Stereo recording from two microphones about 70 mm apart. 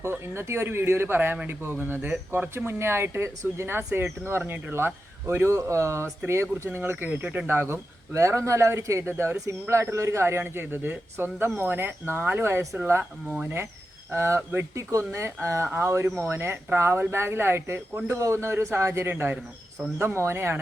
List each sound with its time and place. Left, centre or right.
0.0 s speech: right
13.3 s speech: centre
14.1 s speech: right
19.1 s speech: right